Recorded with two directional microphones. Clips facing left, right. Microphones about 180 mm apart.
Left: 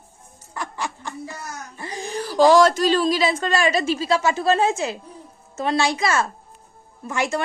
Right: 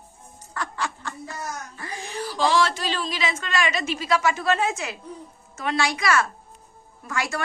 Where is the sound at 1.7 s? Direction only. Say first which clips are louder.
Left 3 dB; 30° left (ahead or behind).